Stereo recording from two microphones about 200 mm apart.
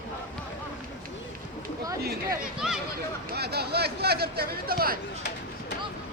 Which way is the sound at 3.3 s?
55° right (ahead or behind).